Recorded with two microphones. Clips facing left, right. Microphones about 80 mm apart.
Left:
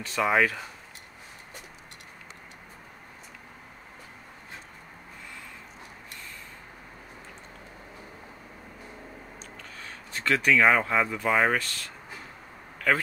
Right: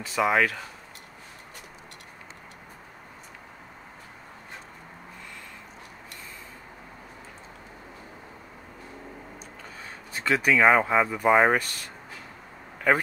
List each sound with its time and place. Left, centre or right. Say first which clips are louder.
0.0 s speech: right 1 dB; centre
9.8 s speech: right 1 dB; centre